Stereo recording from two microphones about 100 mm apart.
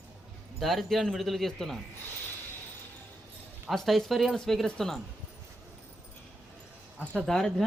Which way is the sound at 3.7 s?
5° left (ahead or behind).